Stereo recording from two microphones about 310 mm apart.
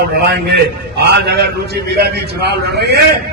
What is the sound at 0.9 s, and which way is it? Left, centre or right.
A man's voice, right.